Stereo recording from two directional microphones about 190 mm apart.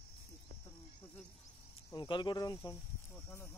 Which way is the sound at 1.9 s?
25° left (ahead or behind).